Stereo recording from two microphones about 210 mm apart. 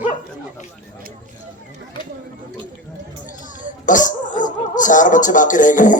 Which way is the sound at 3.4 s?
40° left (ahead or behind).